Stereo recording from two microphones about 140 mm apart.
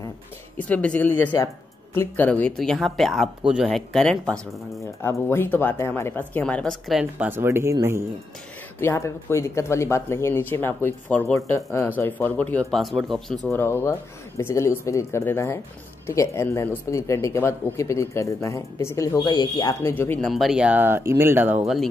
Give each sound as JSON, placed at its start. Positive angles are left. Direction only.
{"t": 0.6, "sound": "speech", "side_deg": 10}
{"t": 5.0, "sound": "speech", "side_deg": 15}
{"t": 8.7, "sound": "speech", "side_deg": 20}
{"t": 13.5, "sound": "speech", "side_deg": 15}
{"t": 20.2, "sound": "speech", "side_deg": 0}